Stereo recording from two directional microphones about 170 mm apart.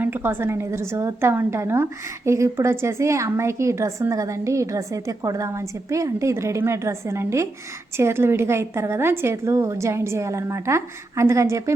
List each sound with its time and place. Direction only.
0.0 s a woman's voice: 10° right (ahead or behind)